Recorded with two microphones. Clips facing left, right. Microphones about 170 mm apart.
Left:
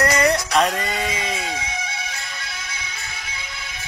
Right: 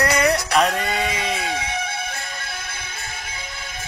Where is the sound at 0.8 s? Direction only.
60° right (ahead or behind).